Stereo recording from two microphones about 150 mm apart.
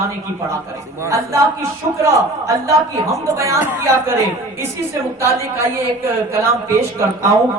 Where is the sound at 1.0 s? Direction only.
20° right (ahead or behind).